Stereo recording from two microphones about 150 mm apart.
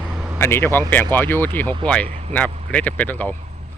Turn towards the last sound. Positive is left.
turn(degrees=10)  # may be behind; listen again after turning